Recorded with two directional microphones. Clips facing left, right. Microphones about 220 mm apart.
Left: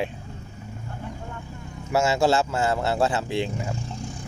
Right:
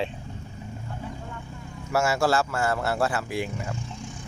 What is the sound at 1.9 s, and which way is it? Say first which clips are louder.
Speech: left 2 dB; 20° left (ahead or behind).